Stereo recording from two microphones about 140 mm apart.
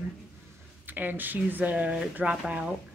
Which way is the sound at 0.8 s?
15° right (ahead or behind).